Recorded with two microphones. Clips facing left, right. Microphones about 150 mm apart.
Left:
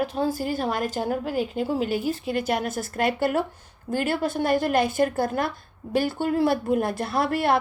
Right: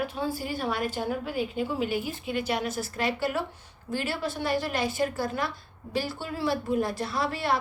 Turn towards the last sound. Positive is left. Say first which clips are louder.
# left 6 dB
turn(degrees=55)  # may be behind; listen again after turning